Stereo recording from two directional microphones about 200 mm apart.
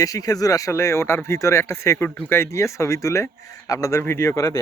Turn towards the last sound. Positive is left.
turn(degrees=15)  # may be behind; listen again after turning